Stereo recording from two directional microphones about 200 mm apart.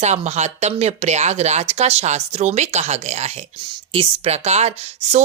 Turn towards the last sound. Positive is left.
turn(degrees=-30)  # may be behind; listen again after turning